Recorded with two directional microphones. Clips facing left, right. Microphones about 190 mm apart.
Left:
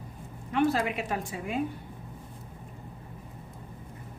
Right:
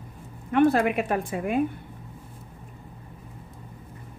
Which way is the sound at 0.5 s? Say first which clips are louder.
Right 6 dB; 55° right (ahead or behind).